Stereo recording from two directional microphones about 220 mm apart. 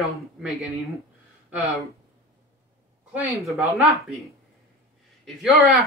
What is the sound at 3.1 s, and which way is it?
Speech, 5° right (ahead or behind).